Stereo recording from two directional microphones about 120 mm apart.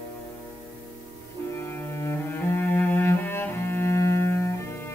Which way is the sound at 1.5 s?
20° left (ahead or behind).